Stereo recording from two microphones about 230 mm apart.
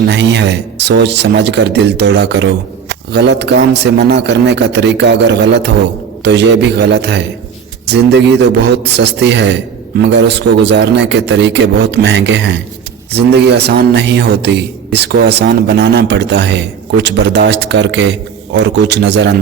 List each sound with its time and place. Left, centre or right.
0.0 s a man's voice: right